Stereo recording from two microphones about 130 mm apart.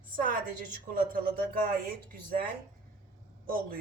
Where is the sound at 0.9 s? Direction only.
90° right.